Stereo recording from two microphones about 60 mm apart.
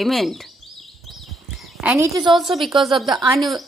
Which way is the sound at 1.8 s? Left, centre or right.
Right.